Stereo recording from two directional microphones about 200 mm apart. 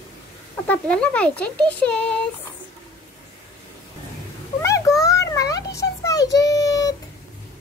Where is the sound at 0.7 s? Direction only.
5° left (ahead or behind).